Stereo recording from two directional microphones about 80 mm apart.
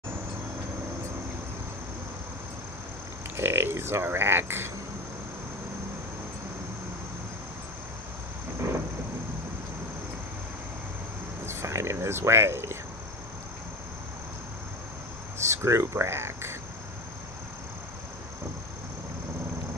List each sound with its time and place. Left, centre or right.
3.3 s speech: right
11.4 s speech: right
15.4 s speech: right